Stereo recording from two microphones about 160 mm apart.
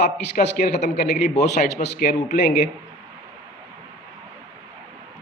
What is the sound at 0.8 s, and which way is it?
Speech, 45° left (ahead or behind).